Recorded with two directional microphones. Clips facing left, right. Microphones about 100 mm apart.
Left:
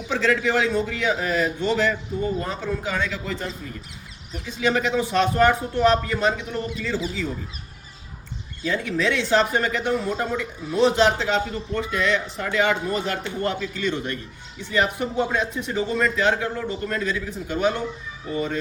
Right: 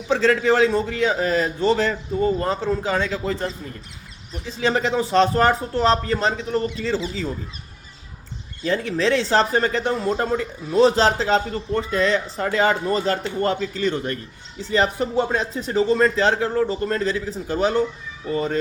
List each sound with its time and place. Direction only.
0.1 s speech: 35° right (ahead or behind)
8.6 s speech: 35° right (ahead or behind)